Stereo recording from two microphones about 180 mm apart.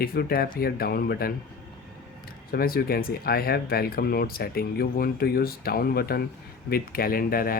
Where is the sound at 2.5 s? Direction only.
55° left (ahead or behind).